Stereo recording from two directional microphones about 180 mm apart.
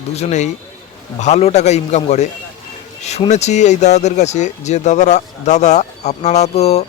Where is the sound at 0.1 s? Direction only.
40° left (ahead or behind).